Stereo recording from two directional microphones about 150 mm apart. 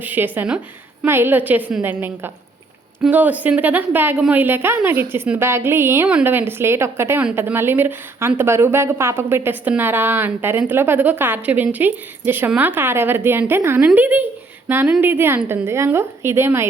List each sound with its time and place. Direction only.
0.0 s a woman's voice: 10° right (ahead or behind)